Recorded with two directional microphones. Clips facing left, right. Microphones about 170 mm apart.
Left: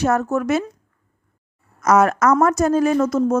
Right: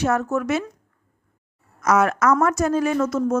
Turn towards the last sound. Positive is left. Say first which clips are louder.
# left 4 dB
turn(degrees=35)  # may be behind; listen again after turning